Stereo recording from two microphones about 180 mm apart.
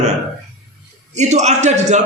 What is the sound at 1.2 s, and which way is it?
Speech, 40° right (ahead or behind).